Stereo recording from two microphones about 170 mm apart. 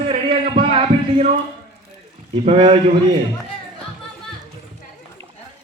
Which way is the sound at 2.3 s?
35° right (ahead or behind).